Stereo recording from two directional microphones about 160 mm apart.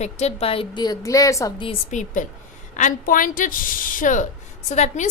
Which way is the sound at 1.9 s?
50° left (ahead or behind).